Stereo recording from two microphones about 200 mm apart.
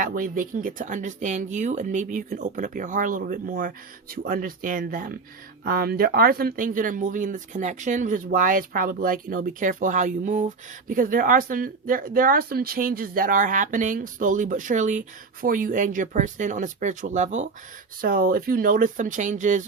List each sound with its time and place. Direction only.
0.0 s speech: 45° right (ahead or behind)